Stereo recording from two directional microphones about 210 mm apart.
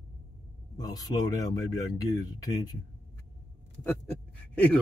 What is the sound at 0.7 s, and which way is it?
Speech, 15° left (ahead or behind).